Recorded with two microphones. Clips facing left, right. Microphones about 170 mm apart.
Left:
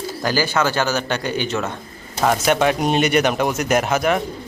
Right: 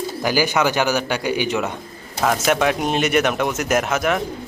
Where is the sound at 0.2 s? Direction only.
15° right (ahead or behind).